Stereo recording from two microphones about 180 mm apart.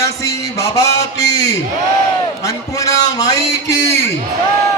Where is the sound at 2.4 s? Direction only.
20° left (ahead or behind).